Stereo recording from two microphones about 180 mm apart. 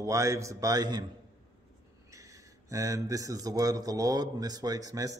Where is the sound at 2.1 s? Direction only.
15° right (ahead or behind).